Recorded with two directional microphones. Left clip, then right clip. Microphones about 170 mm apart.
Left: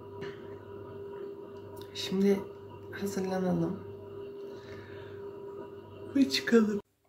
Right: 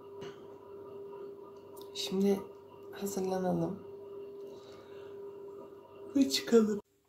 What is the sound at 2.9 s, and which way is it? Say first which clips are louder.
Speech: left 1 dB; centre (ahead or behind).